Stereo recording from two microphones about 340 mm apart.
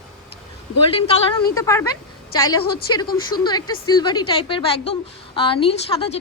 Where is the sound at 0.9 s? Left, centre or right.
Centre.